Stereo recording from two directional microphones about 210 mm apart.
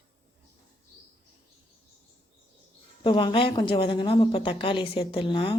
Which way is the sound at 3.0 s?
25° left (ahead or behind).